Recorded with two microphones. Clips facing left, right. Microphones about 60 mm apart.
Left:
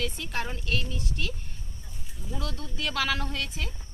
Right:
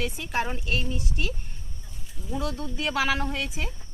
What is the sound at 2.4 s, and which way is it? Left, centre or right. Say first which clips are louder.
Speech: right 4 dB; right.